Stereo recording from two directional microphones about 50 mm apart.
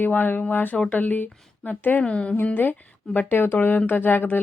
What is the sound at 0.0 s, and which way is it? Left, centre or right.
Speech, left.